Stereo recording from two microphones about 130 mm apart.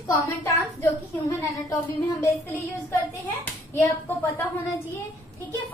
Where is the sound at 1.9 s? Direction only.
15° left (ahead or behind).